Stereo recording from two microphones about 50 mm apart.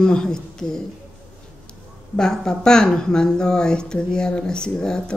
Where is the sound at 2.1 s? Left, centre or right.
Centre.